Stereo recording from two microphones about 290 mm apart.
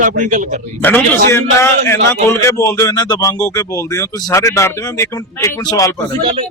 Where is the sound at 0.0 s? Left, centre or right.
Right.